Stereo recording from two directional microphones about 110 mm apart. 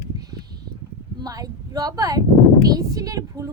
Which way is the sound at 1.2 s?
35° right (ahead or behind).